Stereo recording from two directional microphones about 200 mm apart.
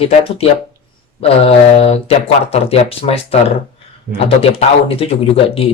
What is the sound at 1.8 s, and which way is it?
Speech, 30° left (ahead or behind).